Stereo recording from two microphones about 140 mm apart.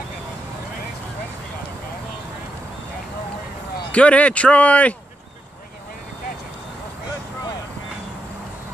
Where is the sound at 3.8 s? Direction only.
10° left (ahead or behind).